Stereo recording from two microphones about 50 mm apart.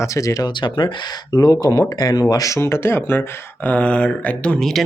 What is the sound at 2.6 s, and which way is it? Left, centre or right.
Speech, left.